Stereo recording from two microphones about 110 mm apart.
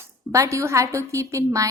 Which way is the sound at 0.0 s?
30° right (ahead or behind).